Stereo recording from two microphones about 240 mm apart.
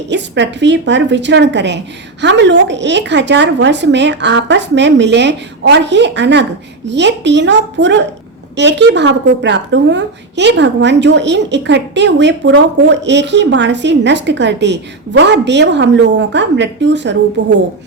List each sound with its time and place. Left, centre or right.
0.1 s a woman's voice: right